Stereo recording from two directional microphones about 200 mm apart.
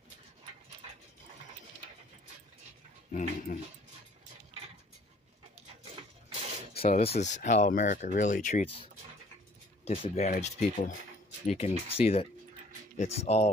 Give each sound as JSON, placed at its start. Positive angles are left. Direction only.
{"t": 3.1, "sound": "speech", "side_deg": 40}
{"t": 6.7, "sound": "speech", "side_deg": 30}
{"t": 9.8, "sound": "speech", "side_deg": 35}